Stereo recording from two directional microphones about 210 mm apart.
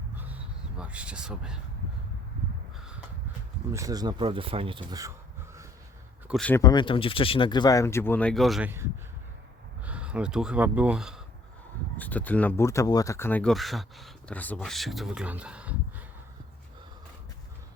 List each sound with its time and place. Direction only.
0.2 s a sound: 5° right (ahead or behind)
3.7 s speech: 15° right (ahead or behind)
6.2 s speech: centre (ahead or behind)
6.6 s speech: 20° left (ahead or behind); by 8.7 s centre (ahead or behind)
9.8 s speech: 5° right (ahead or behind)
11.9 s speech: 10° left (ahead or behind)